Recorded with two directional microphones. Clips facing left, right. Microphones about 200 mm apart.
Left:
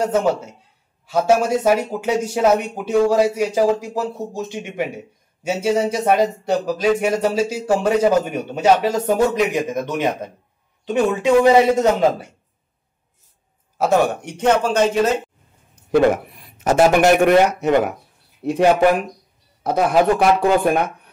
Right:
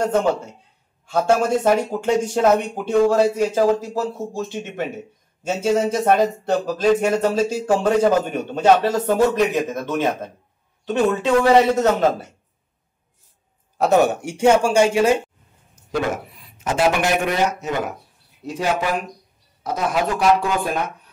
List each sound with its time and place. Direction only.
0.0 s speech: 5° left (ahead or behind)
13.7 s speech: centre (ahead or behind)
15.7 s a sound: 60° left (ahead or behind)
16.6 s speech: 45° left (ahead or behind)